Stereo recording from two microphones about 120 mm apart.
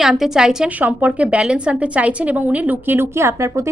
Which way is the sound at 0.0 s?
5° right (ahead or behind).